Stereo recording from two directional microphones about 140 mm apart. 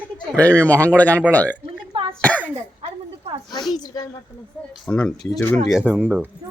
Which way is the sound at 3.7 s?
30° left (ahead or behind).